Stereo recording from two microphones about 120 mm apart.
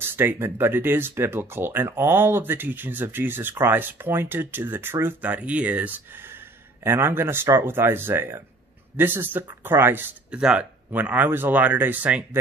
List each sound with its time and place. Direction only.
0.1 s speech: 20° right (ahead or behind)